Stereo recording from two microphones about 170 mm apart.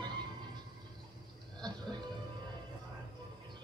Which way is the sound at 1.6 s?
25° right (ahead or behind).